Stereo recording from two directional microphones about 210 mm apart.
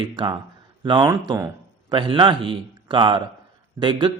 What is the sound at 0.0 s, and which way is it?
Speech, 20° right (ahead or behind).